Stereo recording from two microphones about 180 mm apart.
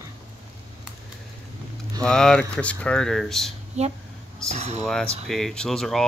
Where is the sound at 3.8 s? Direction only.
35° right (ahead or behind).